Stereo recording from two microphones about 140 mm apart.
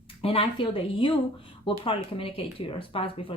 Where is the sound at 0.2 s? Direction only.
45° left (ahead or behind).